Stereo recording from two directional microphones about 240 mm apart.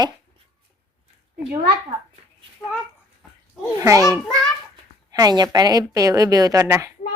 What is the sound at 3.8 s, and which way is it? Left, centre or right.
A woman's voice, centre.